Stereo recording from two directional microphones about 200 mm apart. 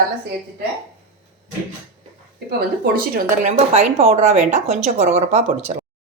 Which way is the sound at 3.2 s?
35° right (ahead or behind).